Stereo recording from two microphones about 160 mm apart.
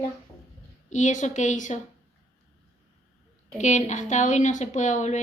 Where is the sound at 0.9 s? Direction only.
50° left (ahead or behind).